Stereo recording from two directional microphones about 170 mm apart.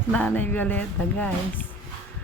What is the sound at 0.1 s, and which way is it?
Speech, 10° left (ahead or behind).